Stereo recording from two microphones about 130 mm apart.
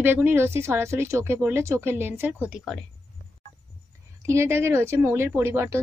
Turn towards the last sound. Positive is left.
turn(degrees=-20)  # may be behind; listen again after turning